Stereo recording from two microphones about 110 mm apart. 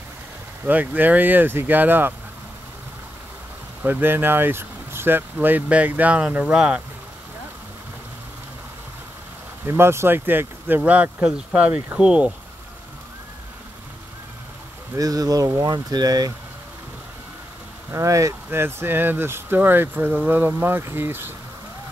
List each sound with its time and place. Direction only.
0.7 s speech: 15° right (ahead or behind)
3.8 s speech: 15° right (ahead or behind)
9.7 s speech: 25° right (ahead or behind)
15.0 s speech: 35° right (ahead or behind)
17.9 s speech: 30° right (ahead or behind)